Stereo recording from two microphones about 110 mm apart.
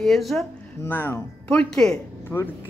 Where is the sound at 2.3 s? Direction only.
25° left (ahead or behind).